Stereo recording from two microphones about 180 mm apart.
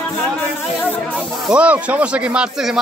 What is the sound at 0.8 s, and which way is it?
Speech, 10° left (ahead or behind).